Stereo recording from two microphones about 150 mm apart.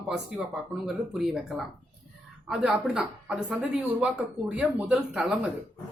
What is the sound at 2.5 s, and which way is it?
A woman's voice, 5° right (ahead or behind).